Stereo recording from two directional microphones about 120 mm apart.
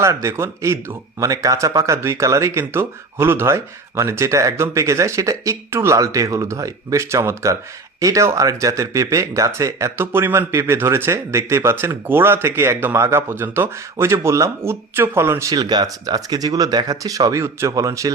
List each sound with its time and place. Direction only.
0.0 s speech: 25° right (ahead or behind)